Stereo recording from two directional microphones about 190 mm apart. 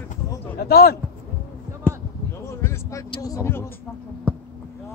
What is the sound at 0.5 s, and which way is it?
Speech, 55° left (ahead or behind).